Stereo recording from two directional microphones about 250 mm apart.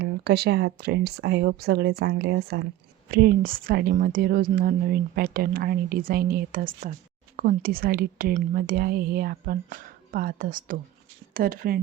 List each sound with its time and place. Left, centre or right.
0.0 s speech: right